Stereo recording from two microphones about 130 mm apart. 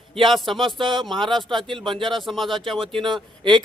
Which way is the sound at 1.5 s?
40° right (ahead or behind).